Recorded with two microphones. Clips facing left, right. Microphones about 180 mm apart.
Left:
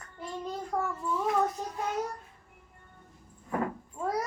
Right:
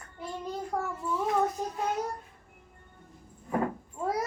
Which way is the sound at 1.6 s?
15° right (ahead or behind).